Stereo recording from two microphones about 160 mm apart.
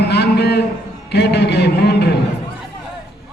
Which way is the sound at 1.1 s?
90° left.